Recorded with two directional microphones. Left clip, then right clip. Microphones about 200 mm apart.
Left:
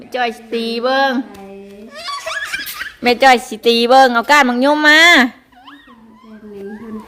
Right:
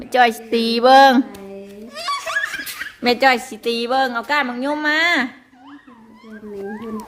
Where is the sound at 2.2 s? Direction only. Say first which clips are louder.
Even; 5° right (ahead or behind).